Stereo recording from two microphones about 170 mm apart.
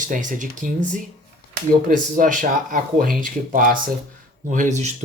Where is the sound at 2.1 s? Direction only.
50° right (ahead or behind).